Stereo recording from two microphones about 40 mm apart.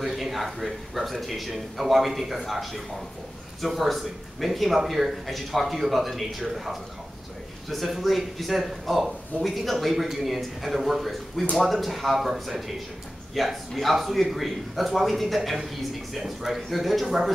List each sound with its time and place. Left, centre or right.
0.0 s a man's voice: centre